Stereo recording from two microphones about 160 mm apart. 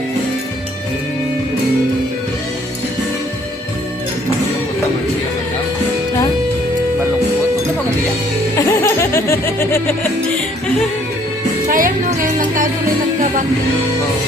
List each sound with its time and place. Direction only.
8.5 s speech: 15° left (ahead or behind)
11.7 s music: 60° right (ahead or behind)